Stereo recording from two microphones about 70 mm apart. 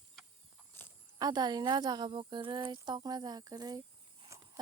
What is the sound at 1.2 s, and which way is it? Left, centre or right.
A woman's voice, right.